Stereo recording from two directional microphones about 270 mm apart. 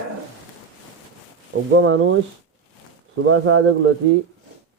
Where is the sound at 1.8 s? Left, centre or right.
Right.